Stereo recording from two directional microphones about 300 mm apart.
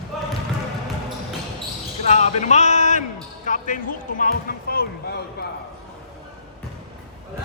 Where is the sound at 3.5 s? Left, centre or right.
Left.